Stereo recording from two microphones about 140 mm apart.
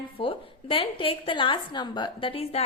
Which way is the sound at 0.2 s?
40° left (ahead or behind).